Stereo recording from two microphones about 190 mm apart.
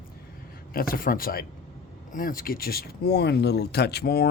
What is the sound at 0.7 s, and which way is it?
Speech, 50° left (ahead or behind).